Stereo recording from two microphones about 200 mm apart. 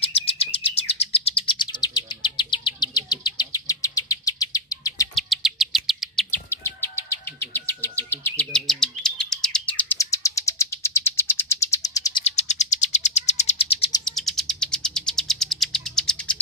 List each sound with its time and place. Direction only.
0.0 s bird: 30° left (ahead or behind)
5.1 s chirp: centre (ahead or behind)
6.3 s bird vocalization: 10° left (ahead or behind)
12.3 s bird: 35° left (ahead or behind)
14.0 s bird: centre (ahead or behind)